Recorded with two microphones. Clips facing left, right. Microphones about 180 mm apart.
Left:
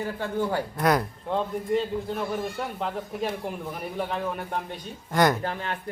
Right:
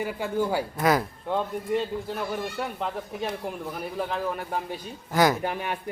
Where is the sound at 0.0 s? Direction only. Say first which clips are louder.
Right 1 dB; 10° right (ahead or behind).